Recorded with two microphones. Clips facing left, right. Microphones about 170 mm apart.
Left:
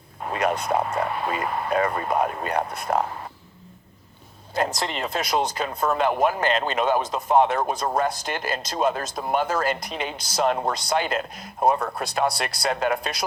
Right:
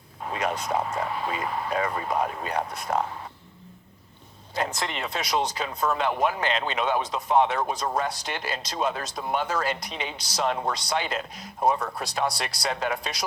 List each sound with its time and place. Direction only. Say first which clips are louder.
0.2 s speech: left 4 dB; 55° left (ahead or behind)
4.7 s speech: left 3 dB; 35° left (ahead or behind)
5.0 s speech: left 3 dB; 50° left (ahead or behind)